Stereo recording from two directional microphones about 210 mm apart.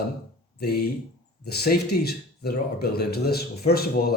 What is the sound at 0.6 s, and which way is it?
Speech, 50° left (ahead or behind).